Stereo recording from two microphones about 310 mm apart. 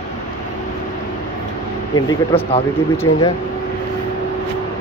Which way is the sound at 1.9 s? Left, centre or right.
Centre.